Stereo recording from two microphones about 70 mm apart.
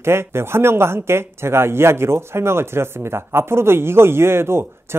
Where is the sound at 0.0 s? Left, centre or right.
Right.